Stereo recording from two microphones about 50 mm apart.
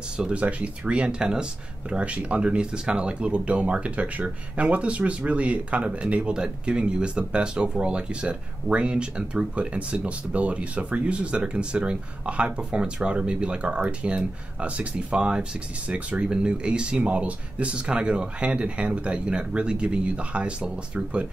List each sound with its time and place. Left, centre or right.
0.2 s speech: right